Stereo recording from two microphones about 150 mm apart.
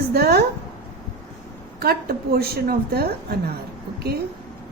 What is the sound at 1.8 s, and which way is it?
A woman's voice, 90° right.